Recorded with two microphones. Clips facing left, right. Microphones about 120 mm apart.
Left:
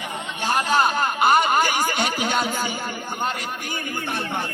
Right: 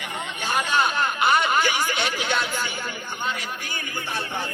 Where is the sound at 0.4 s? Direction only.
40° left (ahead or behind).